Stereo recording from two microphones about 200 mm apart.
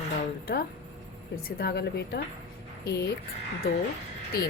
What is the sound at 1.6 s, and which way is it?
Speech, 55° left (ahead or behind).